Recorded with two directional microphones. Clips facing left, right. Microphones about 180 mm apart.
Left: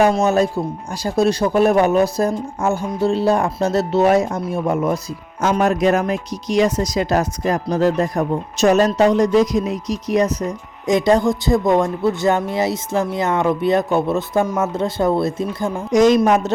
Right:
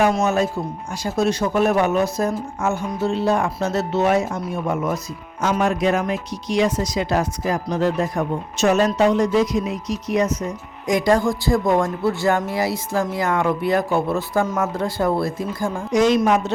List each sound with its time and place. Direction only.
0.0 s speech: 35° left (ahead or behind)
10.8 s speech: 25° left (ahead or behind)
15.9 s speech: 45° left (ahead or behind)